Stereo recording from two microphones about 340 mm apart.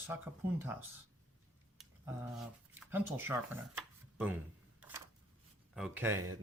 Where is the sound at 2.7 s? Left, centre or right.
Centre.